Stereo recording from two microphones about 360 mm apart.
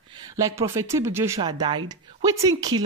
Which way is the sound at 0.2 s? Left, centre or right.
Centre.